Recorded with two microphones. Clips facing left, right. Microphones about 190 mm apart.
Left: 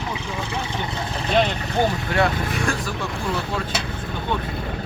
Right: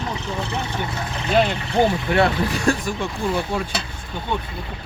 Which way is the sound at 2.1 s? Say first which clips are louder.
Right 3 dB; 25° right (ahead or behind).